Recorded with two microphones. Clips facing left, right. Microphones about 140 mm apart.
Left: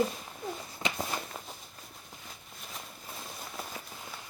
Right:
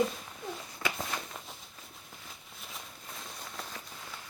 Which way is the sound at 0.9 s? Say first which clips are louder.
Left 2 dB; 5° left (ahead or behind).